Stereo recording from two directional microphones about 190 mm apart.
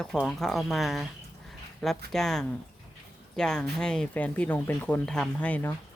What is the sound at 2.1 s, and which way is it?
Speech, 5° left (ahead or behind).